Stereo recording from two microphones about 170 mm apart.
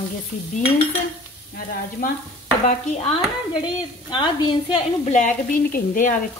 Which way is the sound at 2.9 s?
35° left (ahead or behind).